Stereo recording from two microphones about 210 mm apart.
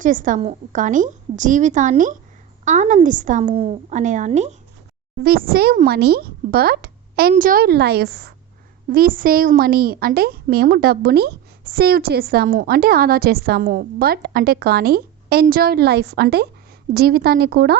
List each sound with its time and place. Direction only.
0.0 s a woman's voice: 40° right (ahead or behind)
5.2 s speech: 45° right (ahead or behind)